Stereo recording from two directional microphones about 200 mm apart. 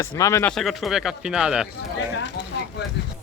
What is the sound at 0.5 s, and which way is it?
Speech, centre (ahead or behind).